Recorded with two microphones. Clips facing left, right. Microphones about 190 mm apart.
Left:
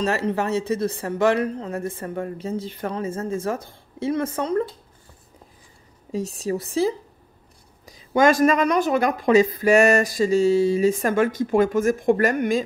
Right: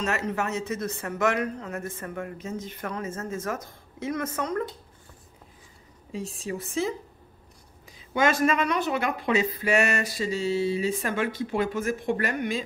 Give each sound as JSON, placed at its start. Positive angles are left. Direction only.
{"t": 0.0, "sound": "speech", "side_deg": 35}
{"t": 6.1, "sound": "speech", "side_deg": 40}